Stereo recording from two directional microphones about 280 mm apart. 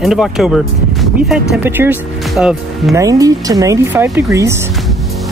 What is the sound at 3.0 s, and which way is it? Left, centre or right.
Speech, centre.